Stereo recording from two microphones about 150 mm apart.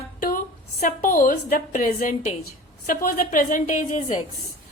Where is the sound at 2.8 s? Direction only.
70° left (ahead or behind).